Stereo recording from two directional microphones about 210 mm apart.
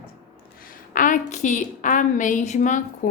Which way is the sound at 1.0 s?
40° left (ahead or behind).